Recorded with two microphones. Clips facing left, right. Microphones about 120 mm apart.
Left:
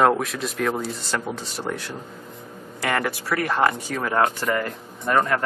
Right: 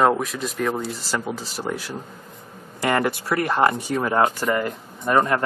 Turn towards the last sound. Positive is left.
turn(degrees=-20)  # may be behind; listen again after turning